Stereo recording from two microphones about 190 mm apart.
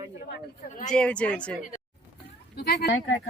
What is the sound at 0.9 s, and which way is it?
Speech, 5° left (ahead or behind).